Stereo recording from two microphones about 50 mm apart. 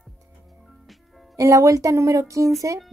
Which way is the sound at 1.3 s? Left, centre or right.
Right.